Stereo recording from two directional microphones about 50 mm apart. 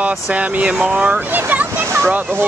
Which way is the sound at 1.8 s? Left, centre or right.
Right.